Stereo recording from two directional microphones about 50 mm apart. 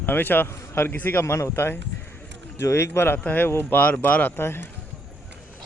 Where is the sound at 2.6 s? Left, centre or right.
Left.